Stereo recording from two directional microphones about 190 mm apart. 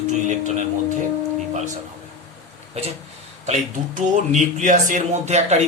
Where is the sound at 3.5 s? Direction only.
40° right (ahead or behind).